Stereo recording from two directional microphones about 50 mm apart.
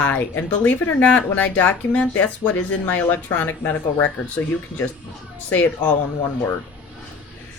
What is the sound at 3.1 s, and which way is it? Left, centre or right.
Speech, left.